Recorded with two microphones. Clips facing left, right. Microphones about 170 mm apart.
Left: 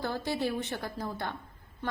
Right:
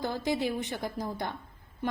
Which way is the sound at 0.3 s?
15° right (ahead or behind).